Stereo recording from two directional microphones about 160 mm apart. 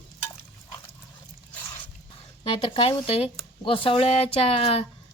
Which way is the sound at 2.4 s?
35° left (ahead or behind).